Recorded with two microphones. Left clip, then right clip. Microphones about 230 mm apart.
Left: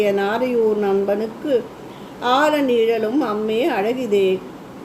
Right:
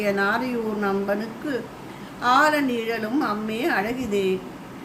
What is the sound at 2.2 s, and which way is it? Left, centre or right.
Speech, right.